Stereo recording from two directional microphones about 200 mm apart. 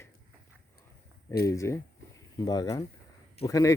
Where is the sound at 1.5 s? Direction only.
15° left (ahead or behind).